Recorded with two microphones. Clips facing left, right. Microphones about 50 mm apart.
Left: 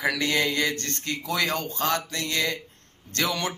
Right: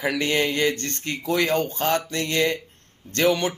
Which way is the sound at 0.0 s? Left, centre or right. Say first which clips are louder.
Right 2 dB; right.